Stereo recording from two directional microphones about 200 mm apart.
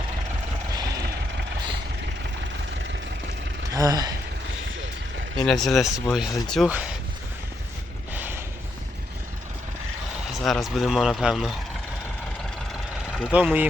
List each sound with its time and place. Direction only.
3.7 s speech: 15° right (ahead or behind)
5.4 s speech: centre (ahead or behind)
8.1 s horse: 10° right (ahead or behind)
10.3 s speech: centre (ahead or behind)
13.1 s speech: 5° right (ahead or behind)